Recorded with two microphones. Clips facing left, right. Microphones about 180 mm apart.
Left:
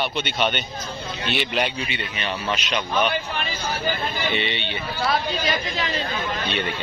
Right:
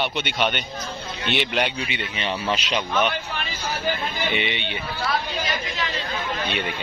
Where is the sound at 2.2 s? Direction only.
25° right (ahead or behind).